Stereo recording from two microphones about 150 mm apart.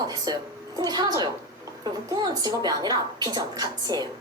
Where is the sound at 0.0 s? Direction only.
25° right (ahead or behind).